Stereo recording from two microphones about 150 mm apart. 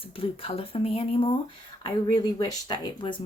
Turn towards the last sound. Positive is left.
turn(degrees=30)  # may be behind; listen again after turning